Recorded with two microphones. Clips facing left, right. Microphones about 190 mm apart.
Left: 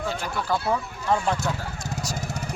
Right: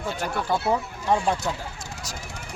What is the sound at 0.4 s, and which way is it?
Speech, 20° right (ahead or behind).